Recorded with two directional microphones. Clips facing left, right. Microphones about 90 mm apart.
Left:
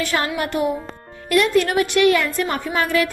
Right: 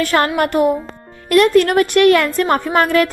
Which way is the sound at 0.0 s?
55° right (ahead or behind).